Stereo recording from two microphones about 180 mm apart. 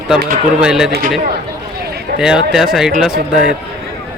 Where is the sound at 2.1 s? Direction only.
5° right (ahead or behind).